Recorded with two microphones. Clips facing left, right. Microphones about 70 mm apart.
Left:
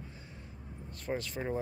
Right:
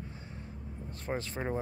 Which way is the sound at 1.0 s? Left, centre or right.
Right.